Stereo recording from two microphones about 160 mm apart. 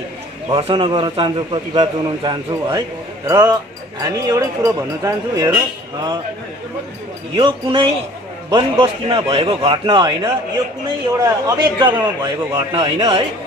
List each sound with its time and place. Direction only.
0.5 s a man's voice: 35° right (ahead or behind)
7.3 s a man's voice: 30° right (ahead or behind)